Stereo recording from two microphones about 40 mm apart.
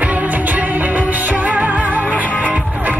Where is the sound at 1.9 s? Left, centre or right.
Right.